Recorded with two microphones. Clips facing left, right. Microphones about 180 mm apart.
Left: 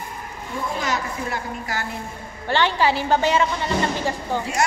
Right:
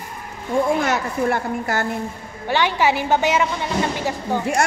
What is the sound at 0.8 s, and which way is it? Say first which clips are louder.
A woman's voice: right 5 dB; 55° right (ahead or behind).